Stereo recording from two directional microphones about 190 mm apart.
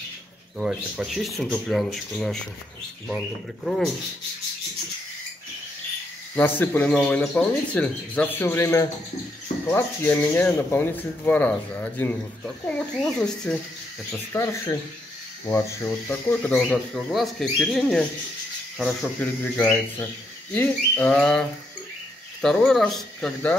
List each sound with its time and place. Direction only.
0.6 s speech: centre (ahead or behind)
6.3 s speech: 10° left (ahead or behind)
14.3 s speech: 15° left (ahead or behind)